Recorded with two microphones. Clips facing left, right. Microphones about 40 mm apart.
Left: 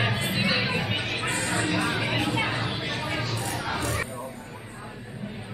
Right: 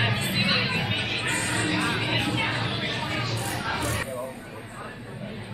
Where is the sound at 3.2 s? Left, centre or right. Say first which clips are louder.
Even; centre.